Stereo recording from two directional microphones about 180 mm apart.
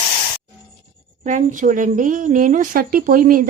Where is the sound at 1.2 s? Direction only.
45° right (ahead or behind).